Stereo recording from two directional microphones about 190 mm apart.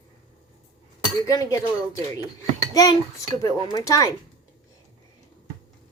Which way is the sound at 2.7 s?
15° left (ahead or behind).